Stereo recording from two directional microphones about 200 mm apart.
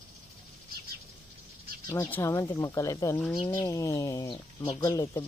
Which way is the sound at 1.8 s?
10° left (ahead or behind).